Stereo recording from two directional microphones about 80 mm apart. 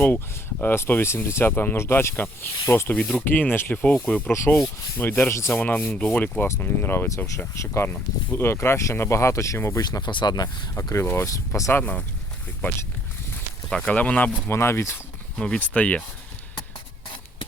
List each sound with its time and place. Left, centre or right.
0.6 s speech: left
5.3 s rub: left
5.5 s rub: left
10.1 s speech: left
10.8 s rub: left
11.7 s speech: centre
13.7 s speech: centre
14.4 s rub: left
15.4 s speech: centre